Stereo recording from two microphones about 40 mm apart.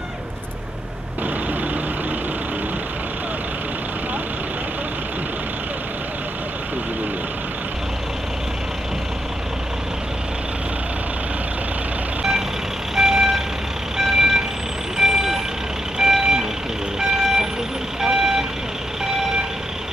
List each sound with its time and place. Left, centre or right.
12.2 s vehicle: centre